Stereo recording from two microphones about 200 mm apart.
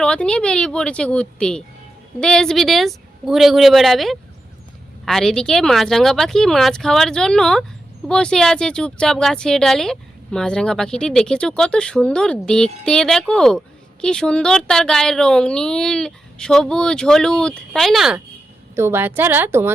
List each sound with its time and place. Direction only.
0.0 s speech: 5° left (ahead or behind)
18.8 s speech: 10° right (ahead or behind)